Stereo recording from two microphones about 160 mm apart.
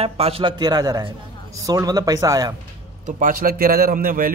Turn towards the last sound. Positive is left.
turn(degrees=-65)  # may be behind; listen again after turning